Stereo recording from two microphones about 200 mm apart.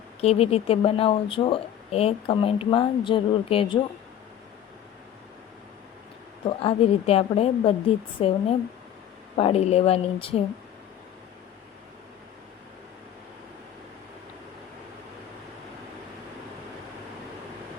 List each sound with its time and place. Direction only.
0.2 s speech: 30° left (ahead or behind)
6.6 s speech: 30° left (ahead or behind)